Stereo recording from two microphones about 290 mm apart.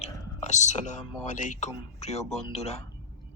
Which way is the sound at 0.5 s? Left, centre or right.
Left.